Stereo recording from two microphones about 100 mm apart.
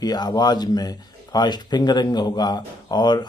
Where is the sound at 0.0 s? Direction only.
45° left (ahead or behind).